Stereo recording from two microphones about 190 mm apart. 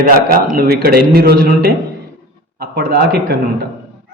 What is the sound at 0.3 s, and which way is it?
A man's voice, 50° right (ahead or behind).